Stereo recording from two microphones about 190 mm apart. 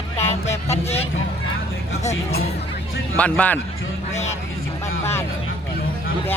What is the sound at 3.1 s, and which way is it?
Speech, 10° left (ahead or behind).